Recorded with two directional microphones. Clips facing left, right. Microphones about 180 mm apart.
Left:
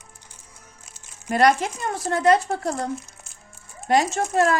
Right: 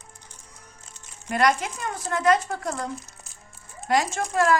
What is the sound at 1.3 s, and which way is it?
Speech, 35° left (ahead or behind).